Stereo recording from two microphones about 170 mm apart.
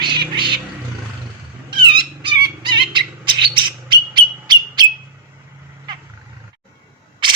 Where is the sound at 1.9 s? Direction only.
30° right (ahead or behind).